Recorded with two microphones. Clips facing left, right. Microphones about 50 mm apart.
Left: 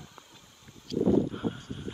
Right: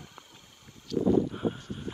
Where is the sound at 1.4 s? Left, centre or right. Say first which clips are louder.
Right 2 dB; centre.